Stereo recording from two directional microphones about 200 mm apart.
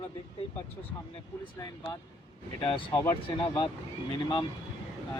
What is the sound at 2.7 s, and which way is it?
Speech, 20° left (ahead or behind).